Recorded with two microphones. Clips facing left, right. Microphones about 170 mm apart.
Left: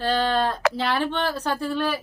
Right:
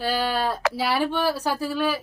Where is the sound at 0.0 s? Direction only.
10° right (ahead or behind).